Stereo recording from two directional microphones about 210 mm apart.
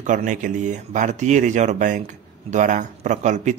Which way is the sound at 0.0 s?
35° right (ahead or behind).